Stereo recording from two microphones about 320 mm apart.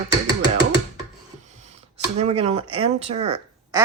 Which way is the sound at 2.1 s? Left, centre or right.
Centre.